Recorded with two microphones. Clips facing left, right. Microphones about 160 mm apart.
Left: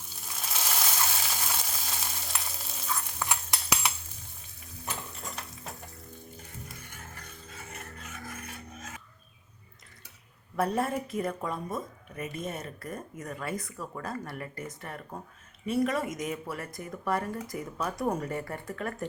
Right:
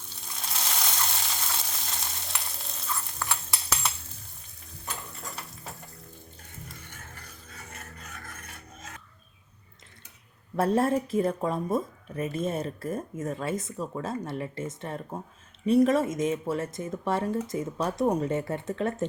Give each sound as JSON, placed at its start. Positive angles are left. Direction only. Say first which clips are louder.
{"t": 0.1, "sound": "a sound", "louder": "even", "side_deg": 0}
{"t": 7.5, "sound": "filing", "louder": "left 1 dB", "side_deg": 0}
{"t": 10.6, "sound": "speech", "louder": "right 5 dB", "side_deg": -30}